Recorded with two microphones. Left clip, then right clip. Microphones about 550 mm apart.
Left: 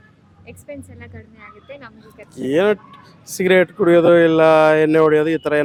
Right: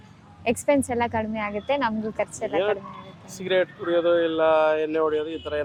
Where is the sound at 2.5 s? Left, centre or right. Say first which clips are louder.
Left 11 dB; left.